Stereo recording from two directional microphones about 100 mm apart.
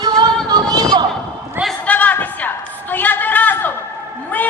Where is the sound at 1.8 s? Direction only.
15° left (ahead or behind).